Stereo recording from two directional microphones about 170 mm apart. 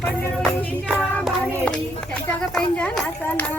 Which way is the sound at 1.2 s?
5° left (ahead or behind).